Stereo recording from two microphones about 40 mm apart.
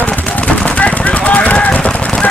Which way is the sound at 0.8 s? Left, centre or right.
Left.